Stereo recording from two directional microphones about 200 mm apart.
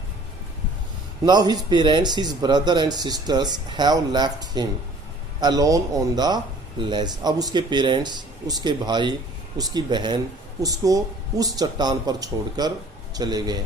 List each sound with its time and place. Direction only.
1.2 s speech: 20° right (ahead or behind)